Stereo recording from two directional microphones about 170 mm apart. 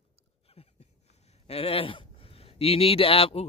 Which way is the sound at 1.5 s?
35° left (ahead or behind).